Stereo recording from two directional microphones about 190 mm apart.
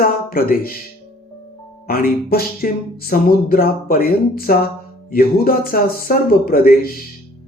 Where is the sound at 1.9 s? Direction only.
50° left (ahead or behind).